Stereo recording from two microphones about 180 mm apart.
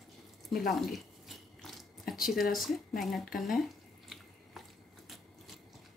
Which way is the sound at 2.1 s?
Centre (ahead or behind).